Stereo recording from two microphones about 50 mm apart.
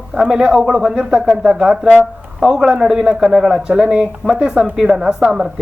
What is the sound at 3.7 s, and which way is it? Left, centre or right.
Speech, centre.